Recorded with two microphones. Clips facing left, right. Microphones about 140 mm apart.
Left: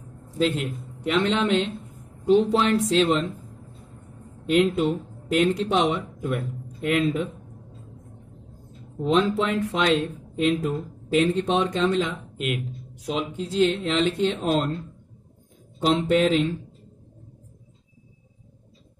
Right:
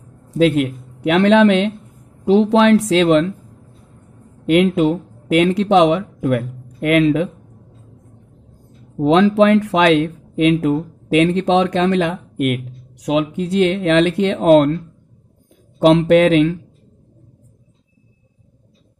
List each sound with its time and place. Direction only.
0.4 s a man's voice: 70° right (ahead or behind)
2.2 s speech: 90° right
4.5 s speech: 70° right (ahead or behind)
9.0 s speech: 90° right
15.8 s speech: 80° right